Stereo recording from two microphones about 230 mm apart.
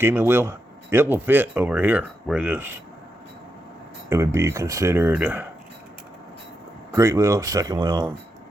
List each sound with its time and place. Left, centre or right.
0.0 s speech: centre
4.1 s speech: centre
6.9 s speech: centre